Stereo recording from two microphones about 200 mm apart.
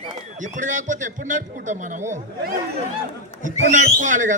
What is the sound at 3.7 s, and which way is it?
Speech, 40° right (ahead or behind).